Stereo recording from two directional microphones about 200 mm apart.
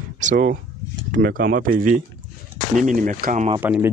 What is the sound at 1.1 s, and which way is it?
Speech, 45° right (ahead or behind).